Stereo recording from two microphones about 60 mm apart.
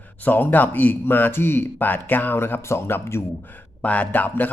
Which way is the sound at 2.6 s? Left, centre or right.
Left.